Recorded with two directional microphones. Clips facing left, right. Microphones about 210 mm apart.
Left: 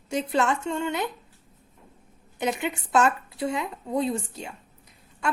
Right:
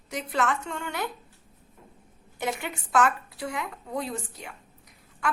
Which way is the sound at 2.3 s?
20° left (ahead or behind).